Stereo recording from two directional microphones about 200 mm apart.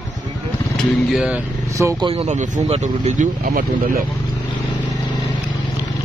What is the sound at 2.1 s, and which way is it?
Speech, 30° right (ahead or behind).